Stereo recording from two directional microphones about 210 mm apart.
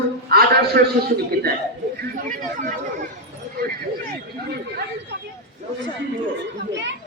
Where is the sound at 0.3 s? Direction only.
50° right (ahead or behind).